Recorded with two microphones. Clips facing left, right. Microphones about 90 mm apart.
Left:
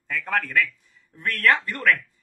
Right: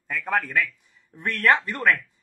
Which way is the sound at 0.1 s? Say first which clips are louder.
Even; 10° right (ahead or behind).